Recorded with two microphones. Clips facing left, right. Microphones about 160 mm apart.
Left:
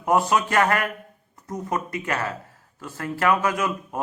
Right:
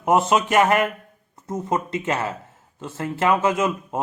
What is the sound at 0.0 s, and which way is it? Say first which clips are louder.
A man's voice: right 2 dB; 20° right (ahead or behind).